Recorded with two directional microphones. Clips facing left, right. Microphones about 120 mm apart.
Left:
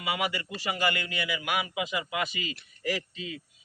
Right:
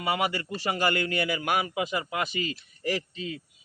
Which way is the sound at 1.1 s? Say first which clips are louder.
Right 4 dB; 45° right (ahead or behind).